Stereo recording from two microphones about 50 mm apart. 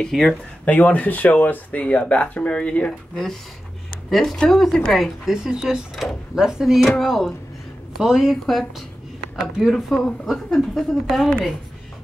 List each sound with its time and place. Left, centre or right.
0.1 s speech: centre
0.7 s speech: left
4.1 s speech: centre
5.3 s speech: centre
7.0 s speech: centre
8.0 s speech: centre